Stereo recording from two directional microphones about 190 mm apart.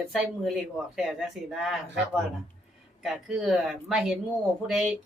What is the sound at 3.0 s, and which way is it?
A woman's voice, centre (ahead or behind).